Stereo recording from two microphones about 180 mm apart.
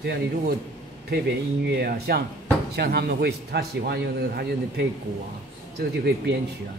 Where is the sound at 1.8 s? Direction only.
60° right (ahead or behind).